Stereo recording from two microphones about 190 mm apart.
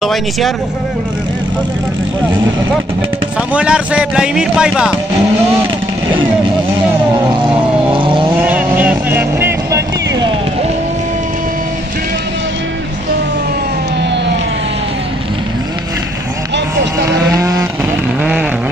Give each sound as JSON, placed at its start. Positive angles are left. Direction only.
{"t": 0.0, "sound": "speech", "side_deg": 0}
{"t": 3.5, "sound": "speech", "side_deg": -5}
{"t": 7.2, "sound": "vehicle", "side_deg": -25}
{"t": 8.3, "sound": "vehicle", "side_deg": -10}
{"t": 17.4, "sound": "vehicle", "side_deg": -15}